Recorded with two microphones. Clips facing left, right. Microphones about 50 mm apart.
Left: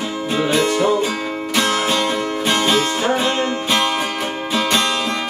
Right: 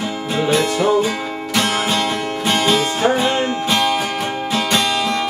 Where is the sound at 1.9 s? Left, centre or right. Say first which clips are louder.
Left 1 dB; centre.